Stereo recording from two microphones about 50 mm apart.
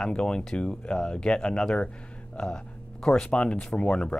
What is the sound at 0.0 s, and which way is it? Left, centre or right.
Speech, centre.